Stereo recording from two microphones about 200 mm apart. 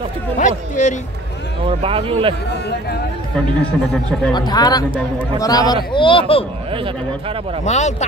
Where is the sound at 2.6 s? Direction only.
55° left (ahead or behind).